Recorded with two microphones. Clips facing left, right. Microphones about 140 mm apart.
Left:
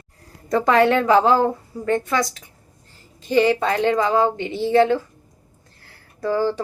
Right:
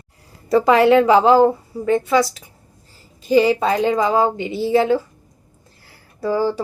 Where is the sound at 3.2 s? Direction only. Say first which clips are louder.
Right 3 dB; 10° right (ahead or behind).